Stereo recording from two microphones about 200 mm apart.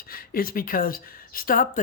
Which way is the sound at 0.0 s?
45° left (ahead or behind).